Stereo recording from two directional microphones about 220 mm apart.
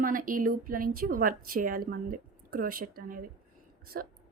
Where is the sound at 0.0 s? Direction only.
40° right (ahead or behind).